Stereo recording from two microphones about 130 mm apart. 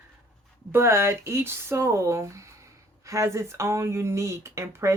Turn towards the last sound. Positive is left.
turn(degrees=-20)  # may be behind; listen again after turning